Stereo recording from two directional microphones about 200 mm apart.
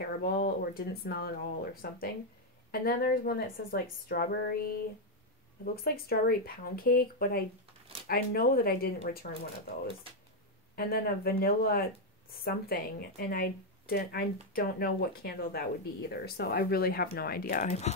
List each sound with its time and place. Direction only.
0.0 s a woman's voice: 50° left (ahead or behind)
5.9 s a woman's voice: 50° left (ahead or behind)
10.8 s a woman's voice: 50° left (ahead or behind); by 17.9 s 35° left (ahead or behind)